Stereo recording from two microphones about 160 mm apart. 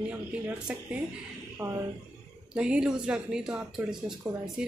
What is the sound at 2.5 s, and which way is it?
A woman's voice, 5° right (ahead or behind).